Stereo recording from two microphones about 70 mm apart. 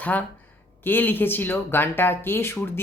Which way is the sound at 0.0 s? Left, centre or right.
Left.